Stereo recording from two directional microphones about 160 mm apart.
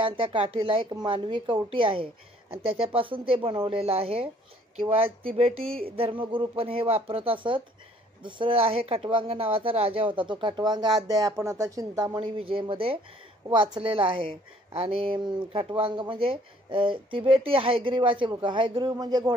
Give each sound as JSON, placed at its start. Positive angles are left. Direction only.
{"t": 0.0, "sound": "a woman's voice", "side_deg": -35}